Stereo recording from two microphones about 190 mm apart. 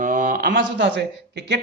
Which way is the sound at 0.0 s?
40° right (ahead or behind).